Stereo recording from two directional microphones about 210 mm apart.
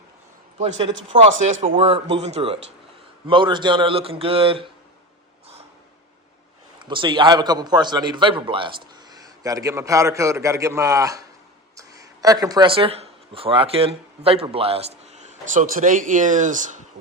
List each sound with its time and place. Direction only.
0.6 s a man's voice: 25° right (ahead or behind)
6.7 s a man's voice: 20° right (ahead or behind)